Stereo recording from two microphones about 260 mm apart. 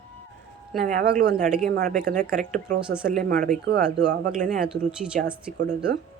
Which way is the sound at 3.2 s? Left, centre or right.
Right.